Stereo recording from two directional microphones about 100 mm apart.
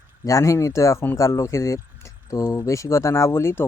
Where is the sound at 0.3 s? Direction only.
30° left (ahead or behind).